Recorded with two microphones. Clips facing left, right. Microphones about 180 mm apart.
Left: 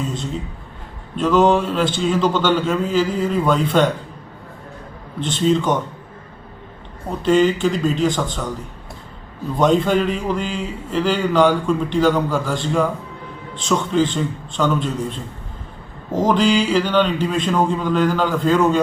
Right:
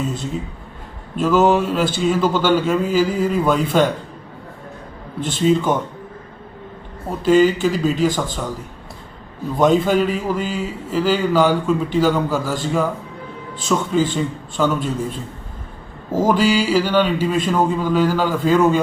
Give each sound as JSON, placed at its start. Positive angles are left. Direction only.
{"t": 1.1, "sound": "speech", "side_deg": -5}
{"t": 5.2, "sound": "speech", "side_deg": -5}
{"t": 7.1, "sound": "a man's voice", "side_deg": -5}
{"t": 9.6, "sound": "a man's voice", "side_deg": -5}